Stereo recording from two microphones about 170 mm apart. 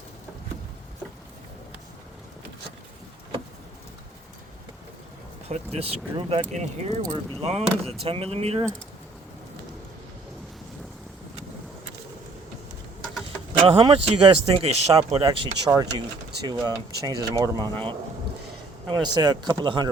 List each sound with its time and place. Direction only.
5.5 s speech: 40° right (ahead or behind)
13.5 s speech: 30° right (ahead or behind)
18.9 s speech: 25° right (ahead or behind)